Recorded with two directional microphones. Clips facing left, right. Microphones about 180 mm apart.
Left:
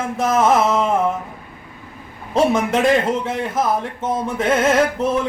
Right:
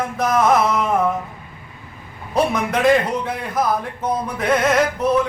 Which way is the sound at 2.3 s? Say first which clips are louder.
Left 3 dB; 25° left (ahead or behind).